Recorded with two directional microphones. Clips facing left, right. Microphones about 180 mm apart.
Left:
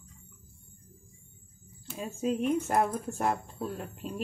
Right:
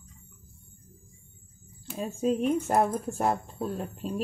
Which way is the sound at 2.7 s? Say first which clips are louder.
Right 3 dB; 35° right (ahead or behind).